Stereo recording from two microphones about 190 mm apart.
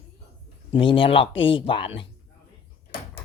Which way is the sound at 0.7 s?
25° left (ahead or behind).